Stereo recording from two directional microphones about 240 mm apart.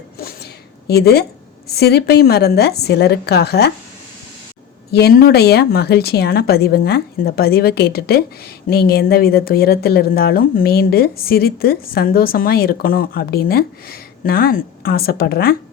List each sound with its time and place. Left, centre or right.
0.9 s a woman's voice: left
4.9 s speech: left